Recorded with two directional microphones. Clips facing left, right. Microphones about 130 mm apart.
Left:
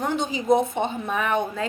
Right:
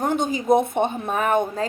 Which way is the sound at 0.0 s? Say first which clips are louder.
Right 3 dB; 50° right (ahead or behind).